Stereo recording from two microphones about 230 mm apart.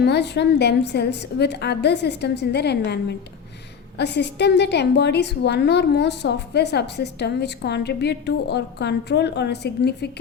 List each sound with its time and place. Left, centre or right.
0.0 s a woman's voice: left